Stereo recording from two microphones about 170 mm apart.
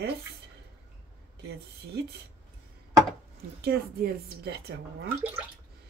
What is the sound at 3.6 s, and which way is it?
A woman's voice, 65° right (ahead or behind).